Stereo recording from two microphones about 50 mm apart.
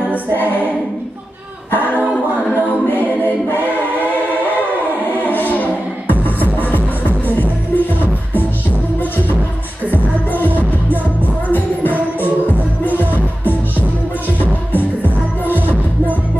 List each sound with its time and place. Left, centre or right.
5.2 s music: left
12.4 s music: left
13.0 s music: right
14.4 s music: left
15.4 s music: right